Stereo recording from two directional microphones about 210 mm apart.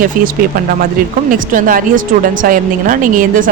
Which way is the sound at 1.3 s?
40° right (ahead or behind).